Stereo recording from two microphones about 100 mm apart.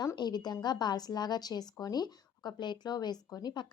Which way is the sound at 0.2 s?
45° left (ahead or behind).